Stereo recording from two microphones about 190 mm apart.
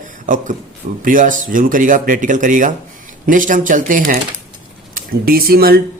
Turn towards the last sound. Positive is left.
turn(degrees=-50)  # may be behind; listen again after turning